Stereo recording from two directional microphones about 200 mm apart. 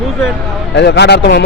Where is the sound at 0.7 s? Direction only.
60° left (ahead or behind).